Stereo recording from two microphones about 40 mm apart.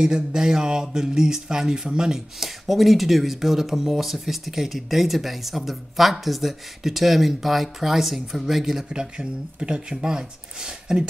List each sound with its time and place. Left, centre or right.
0.0 s speech: centre
2.4 s speech: centre
8.8 s speech: right